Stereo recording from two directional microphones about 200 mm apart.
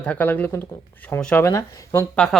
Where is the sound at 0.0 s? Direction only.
10° left (ahead or behind).